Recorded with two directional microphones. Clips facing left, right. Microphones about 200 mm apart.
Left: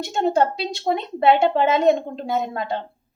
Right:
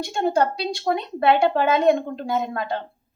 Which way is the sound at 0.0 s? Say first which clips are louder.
Left 1 dB; 20° left (ahead or behind).